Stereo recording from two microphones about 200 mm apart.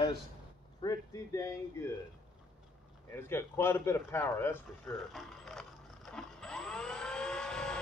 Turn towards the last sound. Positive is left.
turn(degrees=5)  # may be behind; listen again after turning